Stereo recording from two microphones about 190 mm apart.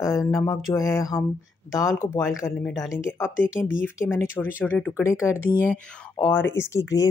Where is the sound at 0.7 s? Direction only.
15° left (ahead or behind).